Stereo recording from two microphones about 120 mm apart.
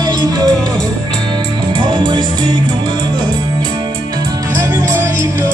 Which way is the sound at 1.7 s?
40° right (ahead or behind).